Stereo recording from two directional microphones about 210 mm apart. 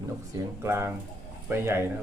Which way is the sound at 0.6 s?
10° right (ahead or behind).